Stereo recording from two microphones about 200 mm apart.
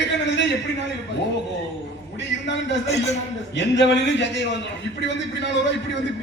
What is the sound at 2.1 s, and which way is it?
A man's voice, 65° left (ahead or behind).